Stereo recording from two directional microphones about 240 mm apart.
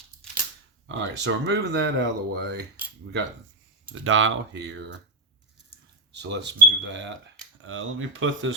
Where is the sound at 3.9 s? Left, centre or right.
Right.